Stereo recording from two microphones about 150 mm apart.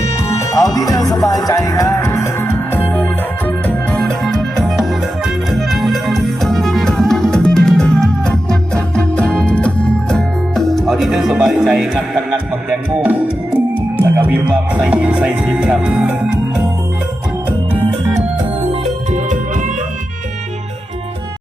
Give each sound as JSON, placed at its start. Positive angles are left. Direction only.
{"t": 0.0, "sound": "music", "side_deg": 20}
{"t": 19.1, "sound": "music", "side_deg": -55}